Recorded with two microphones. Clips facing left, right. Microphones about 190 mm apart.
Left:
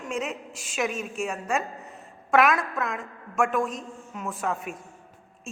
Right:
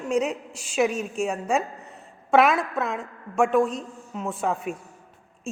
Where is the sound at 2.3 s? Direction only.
30° right (ahead or behind).